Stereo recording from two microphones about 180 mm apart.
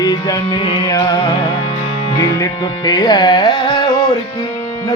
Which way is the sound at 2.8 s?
20° left (ahead or behind).